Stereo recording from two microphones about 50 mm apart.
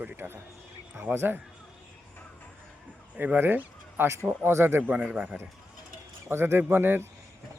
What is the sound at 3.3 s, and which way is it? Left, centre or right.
Speech, right.